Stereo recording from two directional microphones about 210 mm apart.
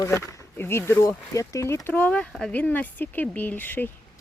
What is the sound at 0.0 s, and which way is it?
Speech, 15° left (ahead or behind).